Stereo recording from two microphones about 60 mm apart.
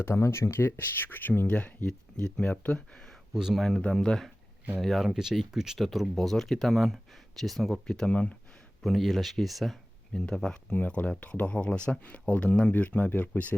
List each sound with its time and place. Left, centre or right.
0.0 s speech: left; by 3.2 s centre
3.3 s speech: centre
3.9 s speech: centre
5.0 s speech: centre
7.9 s speech: centre
8.8 s speech: centre
10.1 s speech: centre